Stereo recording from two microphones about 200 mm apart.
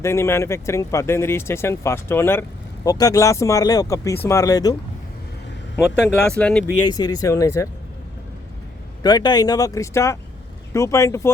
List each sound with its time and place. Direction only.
0.0 s speech: 15° left (ahead or behind)
6.3 s speech: 5° left (ahead or behind)
6.8 s speech: 20° left (ahead or behind)
9.0 s speech: 20° left (ahead or behind)